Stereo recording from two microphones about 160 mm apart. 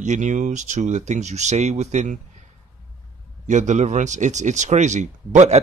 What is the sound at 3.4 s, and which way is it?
Speech, 50° right (ahead or behind).